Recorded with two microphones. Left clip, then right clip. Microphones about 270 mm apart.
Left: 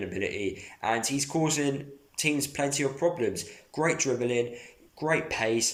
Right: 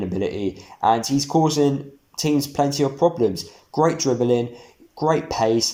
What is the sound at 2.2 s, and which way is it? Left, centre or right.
Speech, centre.